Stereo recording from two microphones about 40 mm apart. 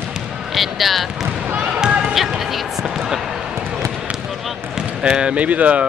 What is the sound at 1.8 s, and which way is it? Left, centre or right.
Basketball bounce, right.